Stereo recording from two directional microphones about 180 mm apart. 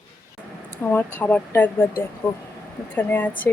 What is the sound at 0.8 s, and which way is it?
Speech, 10° left (ahead or behind).